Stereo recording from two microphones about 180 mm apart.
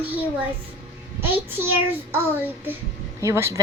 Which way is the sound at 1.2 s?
10° right (ahead or behind).